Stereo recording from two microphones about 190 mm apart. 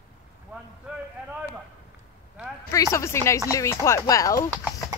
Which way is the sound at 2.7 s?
15° left (ahead or behind).